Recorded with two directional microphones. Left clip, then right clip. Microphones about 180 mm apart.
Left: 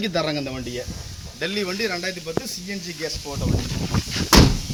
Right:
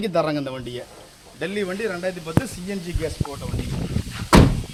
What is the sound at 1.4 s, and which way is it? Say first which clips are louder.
Speech: left 1 dB; 45° right (ahead or behind).